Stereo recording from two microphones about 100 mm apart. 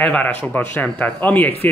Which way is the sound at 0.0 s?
15° left (ahead or behind).